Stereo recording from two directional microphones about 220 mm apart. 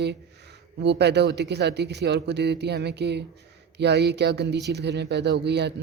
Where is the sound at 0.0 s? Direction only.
50° right (ahead or behind).